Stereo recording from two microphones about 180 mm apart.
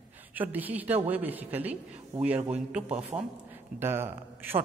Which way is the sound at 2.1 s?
35° right (ahead or behind).